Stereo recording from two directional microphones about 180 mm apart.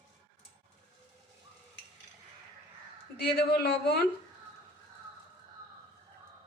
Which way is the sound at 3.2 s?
60° left (ahead or behind).